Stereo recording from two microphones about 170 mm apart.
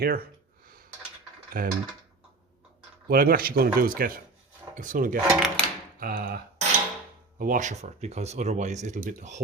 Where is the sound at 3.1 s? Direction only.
60° right (ahead or behind).